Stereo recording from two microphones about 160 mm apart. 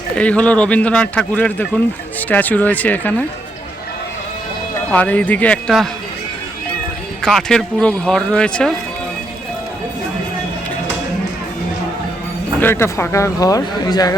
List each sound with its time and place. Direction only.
0.2 s speech: 10° left (ahead or behind)
4.9 s speech: 10° left (ahead or behind)
7.2 s speech: centre (ahead or behind)
12.5 s speech: 15° left (ahead or behind)